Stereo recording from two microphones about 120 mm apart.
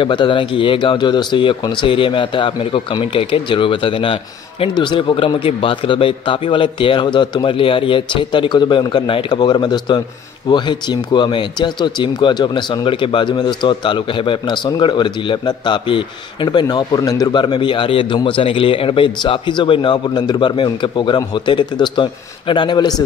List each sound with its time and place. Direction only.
0.0 s a man's voice: 45° left (ahead or behind)